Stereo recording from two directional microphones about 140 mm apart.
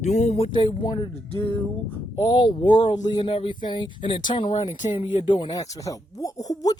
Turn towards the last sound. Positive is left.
turn(degrees=25)  # may be behind; listen again after turning